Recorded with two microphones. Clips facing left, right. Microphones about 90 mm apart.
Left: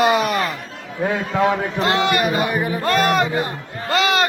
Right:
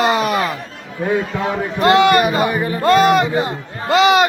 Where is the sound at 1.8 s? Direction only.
65° right (ahead or behind).